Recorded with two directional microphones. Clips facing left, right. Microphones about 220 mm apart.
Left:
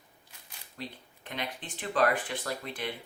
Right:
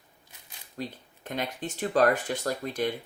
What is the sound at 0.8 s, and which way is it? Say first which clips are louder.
Speech: right 6 dB; 45° right (ahead or behind).